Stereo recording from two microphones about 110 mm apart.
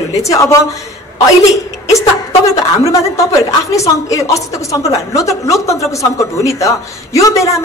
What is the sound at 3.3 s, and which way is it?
A woman's voice, 30° left (ahead or behind).